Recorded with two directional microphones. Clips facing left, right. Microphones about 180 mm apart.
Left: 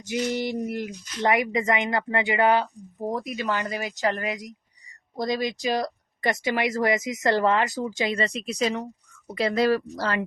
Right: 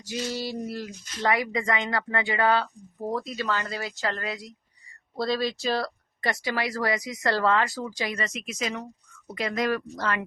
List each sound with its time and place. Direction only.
0.0 s speech: 20° left (ahead or behind)